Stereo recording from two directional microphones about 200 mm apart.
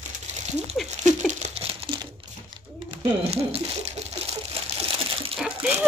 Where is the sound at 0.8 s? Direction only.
35° right (ahead or behind).